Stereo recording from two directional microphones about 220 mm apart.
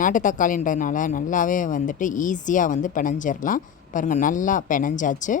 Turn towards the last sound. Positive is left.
turn(degrees=35)  # may be behind; listen again after turning